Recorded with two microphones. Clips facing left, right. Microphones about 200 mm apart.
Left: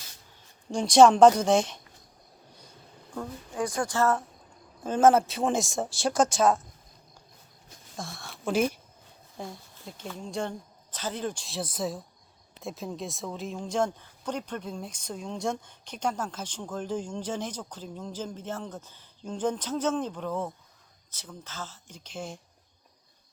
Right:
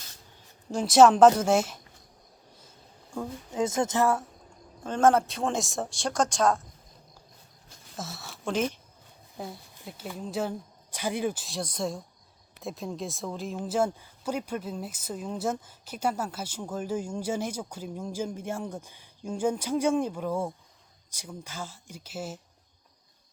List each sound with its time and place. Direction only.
0.7 s speech: 5° right (ahead or behind)
3.5 s speech: 20° right (ahead or behind)
4.8 s speech: 5° left (ahead or behind)
7.9 s speech: 5° right (ahead or behind)
9.8 s speech: 5° right (ahead or behind)